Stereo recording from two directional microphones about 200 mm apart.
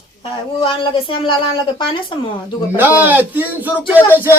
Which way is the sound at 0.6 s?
25° left (ahead or behind).